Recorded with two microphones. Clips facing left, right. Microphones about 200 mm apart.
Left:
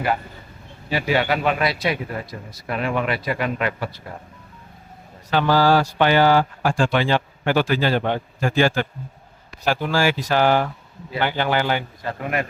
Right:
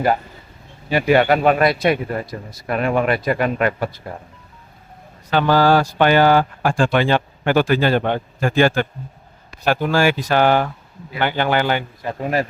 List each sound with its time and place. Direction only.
0.9 s speech: 55° right (ahead or behind)
5.3 s speech: 55° right (ahead or behind)
12.0 s a man's voice: 15° right (ahead or behind)